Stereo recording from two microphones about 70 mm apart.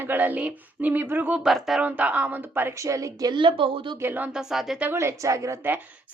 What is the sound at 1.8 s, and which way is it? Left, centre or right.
Speech, right.